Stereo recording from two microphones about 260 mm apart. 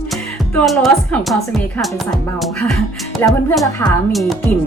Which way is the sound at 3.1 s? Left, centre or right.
Centre.